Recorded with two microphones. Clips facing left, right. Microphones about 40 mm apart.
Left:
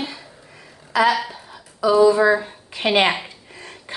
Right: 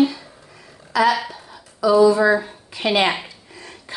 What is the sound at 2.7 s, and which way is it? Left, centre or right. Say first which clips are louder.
Speech: left 1 dB; left.